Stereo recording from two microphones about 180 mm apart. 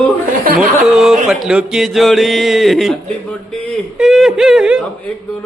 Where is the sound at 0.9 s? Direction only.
Centre (ahead or behind).